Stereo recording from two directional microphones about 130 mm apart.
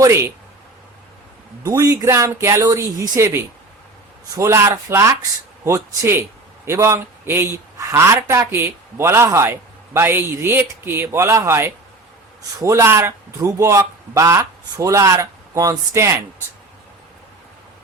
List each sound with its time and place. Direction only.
0.0 s a man's voice: 20° right (ahead or behind)
1.6 s a man's voice: 25° right (ahead or behind)